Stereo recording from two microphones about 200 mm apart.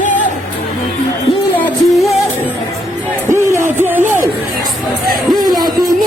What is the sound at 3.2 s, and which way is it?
Music, 15° right (ahead or behind).